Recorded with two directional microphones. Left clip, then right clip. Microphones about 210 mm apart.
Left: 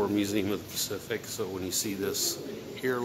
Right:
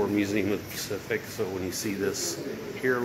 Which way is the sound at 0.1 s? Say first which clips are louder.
Right 2 dB; 20° left (ahead or behind).